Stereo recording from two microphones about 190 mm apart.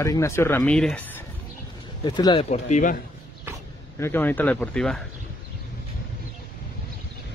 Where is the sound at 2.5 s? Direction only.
40° left (ahead or behind).